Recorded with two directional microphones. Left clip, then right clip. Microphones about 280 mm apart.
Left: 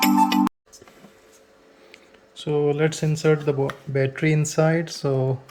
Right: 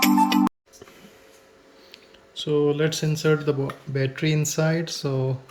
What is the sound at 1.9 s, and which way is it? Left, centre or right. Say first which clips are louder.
Speech: right 6 dB; centre.